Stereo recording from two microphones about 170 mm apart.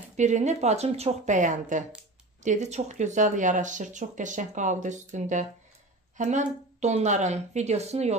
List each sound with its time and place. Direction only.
0.1 s speech: 45° right (ahead or behind)